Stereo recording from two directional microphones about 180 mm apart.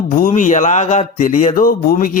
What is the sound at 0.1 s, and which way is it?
Speech, 45° left (ahead or behind).